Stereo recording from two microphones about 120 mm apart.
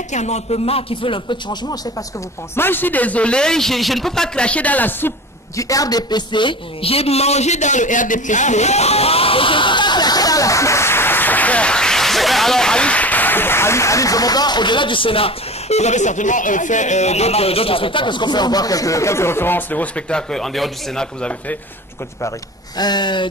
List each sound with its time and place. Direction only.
0.1 s a man's voice: 70° left (ahead or behind); by 1.8 s 40° left (ahead or behind)
2.5 s a man's voice: 20° left (ahead or behind)
5.6 s a man's voice: 30° left (ahead or behind); by 21.5 s 10° left (ahead or behind)
22.8 s a man's voice: 35° left (ahead or behind)